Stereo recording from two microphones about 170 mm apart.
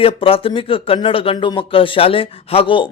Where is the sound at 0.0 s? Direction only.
35° left (ahead or behind).